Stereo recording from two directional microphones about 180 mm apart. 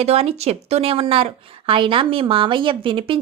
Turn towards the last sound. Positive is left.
turn(degrees=-30)  # may be behind; listen again after turning